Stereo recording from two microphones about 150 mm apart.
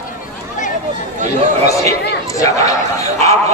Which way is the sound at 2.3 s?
20° left (ahead or behind).